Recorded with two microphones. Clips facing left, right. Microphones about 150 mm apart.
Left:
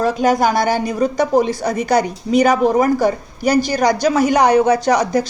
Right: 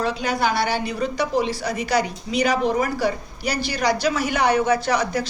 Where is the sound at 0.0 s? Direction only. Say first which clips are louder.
Left 7 dB; 45° left (ahead or behind).